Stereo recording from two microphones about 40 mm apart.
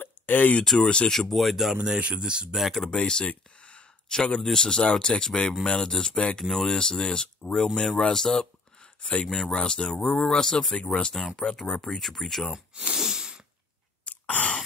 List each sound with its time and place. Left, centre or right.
0.0 s a sound: left
0.7 s speech: left
1.3 s speech: centre
1.9 s speech: right
2.5 s speech: centre
3.0 s speech: left
3.3 s a sound: left
4.1 s speech: centre
10.0 s speech: centre
12.9 s sneeze: centre
14.0 s a sound: left